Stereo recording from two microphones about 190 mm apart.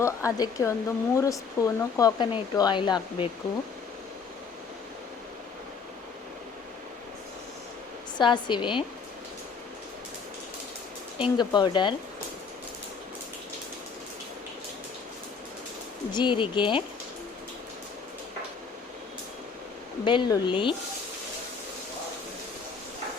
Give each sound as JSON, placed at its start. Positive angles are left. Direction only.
{"t": 0.0, "sound": "speech", "side_deg": 15}
{"t": 8.2, "sound": "speech", "side_deg": 25}
{"t": 11.2, "sound": "speech", "side_deg": 25}
{"t": 16.1, "sound": "speech", "side_deg": 25}
{"t": 20.1, "sound": "speech", "side_deg": 25}